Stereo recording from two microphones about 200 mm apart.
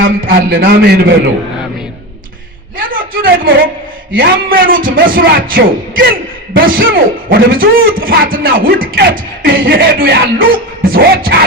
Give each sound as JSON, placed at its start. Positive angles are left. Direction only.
{"t": 0.3, "sound": "music", "side_deg": -50}
{"t": 2.7, "sound": "a sound", "side_deg": -45}
{"t": 4.1, "sound": "music", "side_deg": -45}